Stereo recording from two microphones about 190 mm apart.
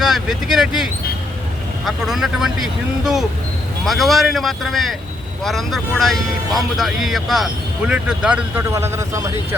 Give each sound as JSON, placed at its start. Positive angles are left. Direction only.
{"t": 0.0, "sound": "speech", "side_deg": 0}